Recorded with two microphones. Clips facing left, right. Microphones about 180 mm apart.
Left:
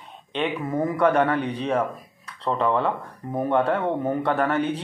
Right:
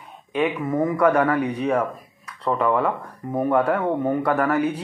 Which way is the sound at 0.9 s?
30° left (ahead or behind).